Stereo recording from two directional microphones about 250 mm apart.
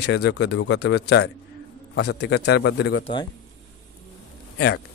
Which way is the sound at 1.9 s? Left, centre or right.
Left.